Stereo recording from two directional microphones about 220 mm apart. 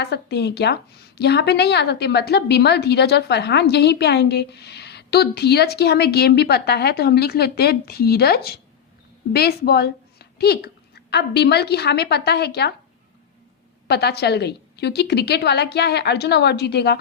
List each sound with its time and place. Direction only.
0.0 s a woman's voice: 50° left (ahead or behind)
13.8 s a woman's voice: 50° left (ahead or behind)